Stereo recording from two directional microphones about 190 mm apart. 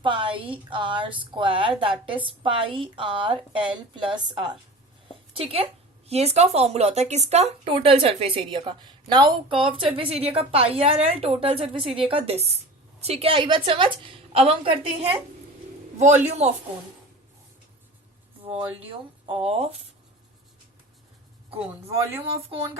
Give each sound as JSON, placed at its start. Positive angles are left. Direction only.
{"t": 0.0, "sound": "a woman's voice", "side_deg": -25}
{"t": 19.4, "sound": "speech", "side_deg": -30}